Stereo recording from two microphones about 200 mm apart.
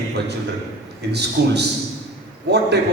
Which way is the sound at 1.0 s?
55° right (ahead or behind).